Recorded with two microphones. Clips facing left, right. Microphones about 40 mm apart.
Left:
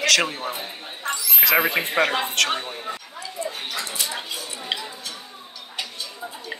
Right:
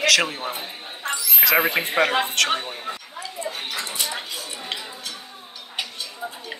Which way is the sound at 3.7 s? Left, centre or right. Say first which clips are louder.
Right 1 dB; right.